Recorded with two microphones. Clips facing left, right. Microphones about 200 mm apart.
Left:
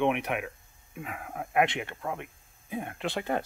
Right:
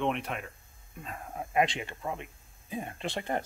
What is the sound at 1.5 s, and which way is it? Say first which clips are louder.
Speech: left 2 dB; 60° left (ahead or behind).